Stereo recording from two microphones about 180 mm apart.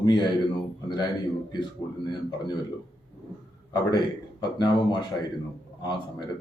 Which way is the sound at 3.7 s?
25° left (ahead or behind).